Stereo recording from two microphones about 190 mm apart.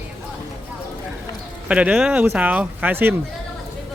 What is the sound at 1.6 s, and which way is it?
Speech, 5° right (ahead or behind).